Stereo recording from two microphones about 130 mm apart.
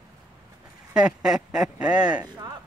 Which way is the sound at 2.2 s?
30° right (ahead or behind).